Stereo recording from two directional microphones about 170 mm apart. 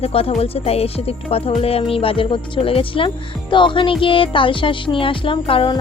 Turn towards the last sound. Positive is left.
turn(degrees=30)  # may be behind; listen again after turning